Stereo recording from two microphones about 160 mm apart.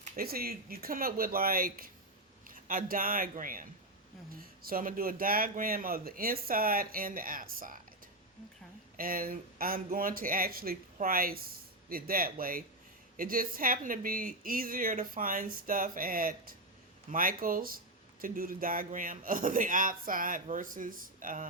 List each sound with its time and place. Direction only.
0.0 s speech: 65° right (ahead or behind)
9.0 s speech: 60° right (ahead or behind)